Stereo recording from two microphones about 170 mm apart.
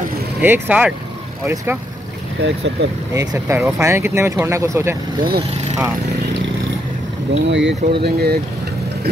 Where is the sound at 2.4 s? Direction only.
90° right.